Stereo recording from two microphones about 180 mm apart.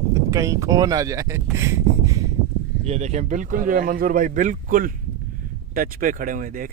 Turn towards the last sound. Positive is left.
turn(degrees=-50)  # may be behind; listen again after turning